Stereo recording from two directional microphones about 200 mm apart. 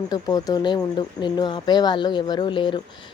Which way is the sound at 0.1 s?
20° left (ahead or behind).